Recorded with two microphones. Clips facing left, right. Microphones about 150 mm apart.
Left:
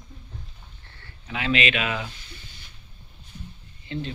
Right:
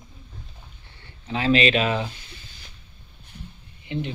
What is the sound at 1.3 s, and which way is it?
Speech, 35° right (ahead or behind).